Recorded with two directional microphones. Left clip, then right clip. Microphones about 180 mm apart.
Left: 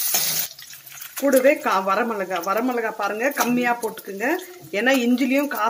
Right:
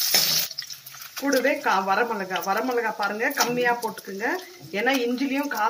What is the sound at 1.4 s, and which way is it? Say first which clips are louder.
Speech: left 4 dB; 50° left (ahead or behind).